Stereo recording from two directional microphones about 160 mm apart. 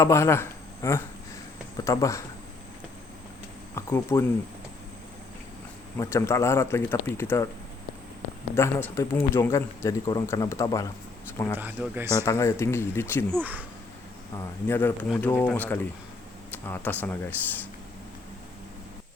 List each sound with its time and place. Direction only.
0.0 s speech: 15° left (ahead or behind)
3.8 s speech: 15° left (ahead or behind)
6.0 s speech: 15° left (ahead or behind)
8.5 s speech: 15° left (ahead or behind)
11.5 s speech: 10° right (ahead or behind)
12.2 s speech: 20° left (ahead or behind)
13.3 s speech: 10° right (ahead or behind)
14.3 s speech: 15° left (ahead or behind)